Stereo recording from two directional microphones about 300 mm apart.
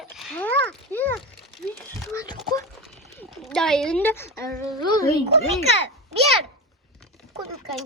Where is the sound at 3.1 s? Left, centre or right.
Centre.